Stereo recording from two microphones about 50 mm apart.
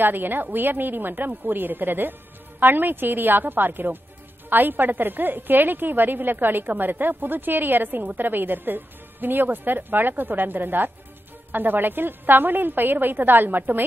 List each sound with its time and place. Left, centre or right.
0.0 s a woman's voice: right